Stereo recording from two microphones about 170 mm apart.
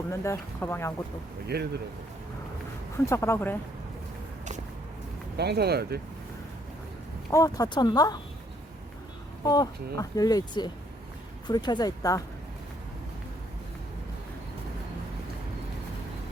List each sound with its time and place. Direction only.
0.1 s speech: 15° left (ahead or behind)
1.5 s speech: 70° right (ahead or behind)
3.1 s speech: 15° left (ahead or behind)
5.4 s speech: 75° right (ahead or behind)
7.3 s speech: 20° left (ahead or behind)
9.5 s speech: 20° left (ahead or behind)